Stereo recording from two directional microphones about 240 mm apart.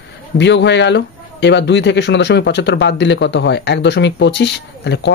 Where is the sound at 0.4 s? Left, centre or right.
Left.